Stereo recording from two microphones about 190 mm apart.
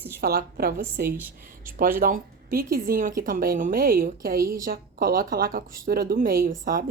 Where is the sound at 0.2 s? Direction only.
55° right (ahead or behind).